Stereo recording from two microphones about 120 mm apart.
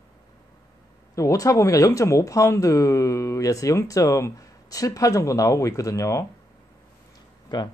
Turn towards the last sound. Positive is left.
turn(degrees=35)  # may be behind; listen again after turning